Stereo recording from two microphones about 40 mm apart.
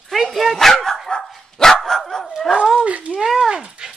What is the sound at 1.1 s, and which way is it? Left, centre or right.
Dog, left.